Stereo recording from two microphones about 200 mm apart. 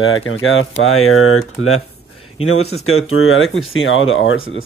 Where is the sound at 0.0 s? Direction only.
80° left.